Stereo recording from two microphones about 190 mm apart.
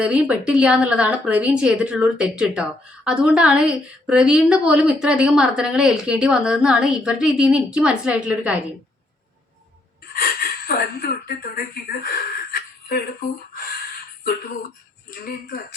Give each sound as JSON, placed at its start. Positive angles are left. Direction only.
{"t": 0.0, "sound": "a woman's voice", "side_deg": -5}
{"t": 10.1, "sound": "speech", "side_deg": 50}
{"t": 15.2, "sound": "speech", "side_deg": 50}